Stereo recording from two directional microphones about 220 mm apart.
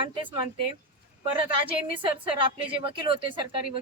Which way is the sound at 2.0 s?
25° right (ahead or behind).